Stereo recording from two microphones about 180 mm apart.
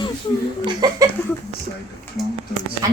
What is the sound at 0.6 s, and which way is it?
Laughter, 20° right (ahead or behind).